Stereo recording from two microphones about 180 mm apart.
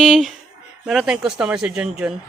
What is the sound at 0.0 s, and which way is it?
Speech, centre (ahead or behind).